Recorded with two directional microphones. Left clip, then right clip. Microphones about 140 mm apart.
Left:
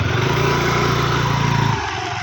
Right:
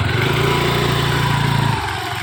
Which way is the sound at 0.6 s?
15° right (ahead or behind).